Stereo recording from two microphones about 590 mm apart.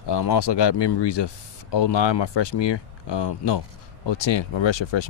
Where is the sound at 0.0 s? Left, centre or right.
Left.